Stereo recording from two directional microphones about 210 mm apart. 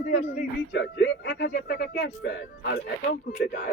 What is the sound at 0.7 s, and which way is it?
Speech, 60° left (ahead or behind).